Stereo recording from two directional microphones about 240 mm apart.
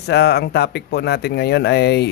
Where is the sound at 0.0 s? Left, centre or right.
Left.